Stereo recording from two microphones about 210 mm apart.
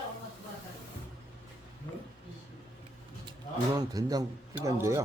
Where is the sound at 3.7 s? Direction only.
20° right (ahead or behind).